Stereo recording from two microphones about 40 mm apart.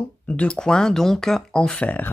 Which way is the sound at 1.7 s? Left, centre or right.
Left.